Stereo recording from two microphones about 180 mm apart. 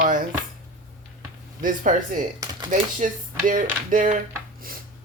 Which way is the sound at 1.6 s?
45° right (ahead or behind).